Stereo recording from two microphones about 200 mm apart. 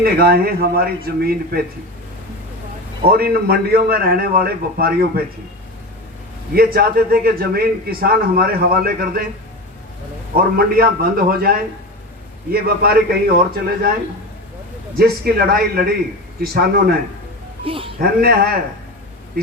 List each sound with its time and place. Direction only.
0.0 s a man's voice: 50° right (ahead or behind)
3.1 s a man's voice: 50° right (ahead or behind)
6.5 s a man's voice: 50° right (ahead or behind)
10.3 s a man's voice: 50° right (ahead or behind)
15.2 s a man's voice: 50° right (ahead or behind)
17.7 s speech: 25° right (ahead or behind)
18.0 s a man's voice: 50° right (ahead or behind)